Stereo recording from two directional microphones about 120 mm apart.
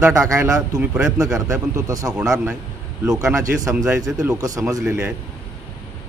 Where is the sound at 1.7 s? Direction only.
30° right (ahead or behind).